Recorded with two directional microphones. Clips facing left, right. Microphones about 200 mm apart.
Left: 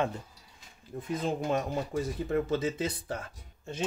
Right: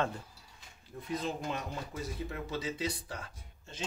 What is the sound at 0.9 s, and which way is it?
Speech, 50° left (ahead or behind).